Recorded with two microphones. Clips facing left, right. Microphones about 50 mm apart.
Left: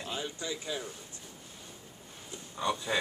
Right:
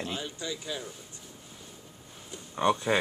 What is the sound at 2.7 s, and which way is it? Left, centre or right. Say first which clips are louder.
Speech: right 6 dB; right.